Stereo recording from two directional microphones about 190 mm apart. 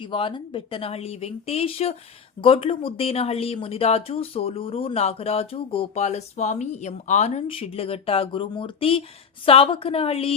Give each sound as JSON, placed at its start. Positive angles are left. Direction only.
{"t": 0.0, "sound": "speech", "side_deg": 25}